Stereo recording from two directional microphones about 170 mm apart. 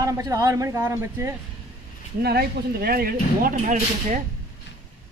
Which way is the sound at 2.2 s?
70° right (ahead or behind).